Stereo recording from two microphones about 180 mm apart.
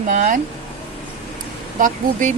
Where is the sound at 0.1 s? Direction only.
45° right (ahead or behind).